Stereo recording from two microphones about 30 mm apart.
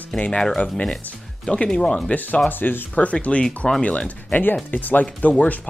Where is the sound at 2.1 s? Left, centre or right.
Left.